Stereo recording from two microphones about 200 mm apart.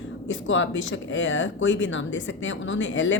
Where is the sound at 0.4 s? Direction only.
70° left (ahead or behind).